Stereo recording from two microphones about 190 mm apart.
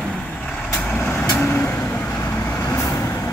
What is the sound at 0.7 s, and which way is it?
Vehicle, 5° left (ahead or behind).